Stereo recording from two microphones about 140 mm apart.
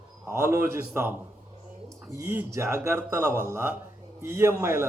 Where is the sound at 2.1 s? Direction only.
15° right (ahead or behind).